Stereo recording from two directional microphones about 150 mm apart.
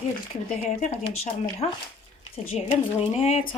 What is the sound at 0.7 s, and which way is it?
A woman's voice, 45° left (ahead or behind).